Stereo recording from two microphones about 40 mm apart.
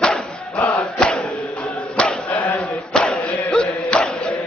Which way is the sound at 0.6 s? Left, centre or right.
Left.